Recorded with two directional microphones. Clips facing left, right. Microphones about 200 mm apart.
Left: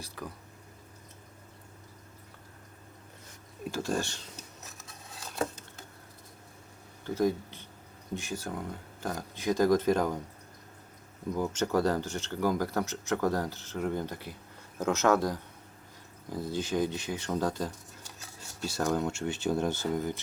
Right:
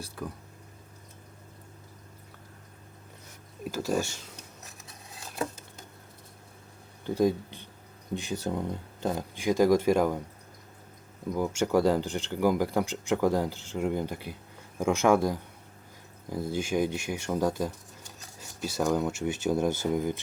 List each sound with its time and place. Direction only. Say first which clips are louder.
3.6 s speech: right 3 dB; 5° right (ahead or behind)
7.0 s speech: right 3 dB; 15° right (ahead or behind)
11.3 s speech: right 3 dB; 10° right (ahead or behind)
16.5 s speech: right 2 dB; 10° right (ahead or behind)
18.8 s speech: right 3 dB; 5° right (ahead or behind)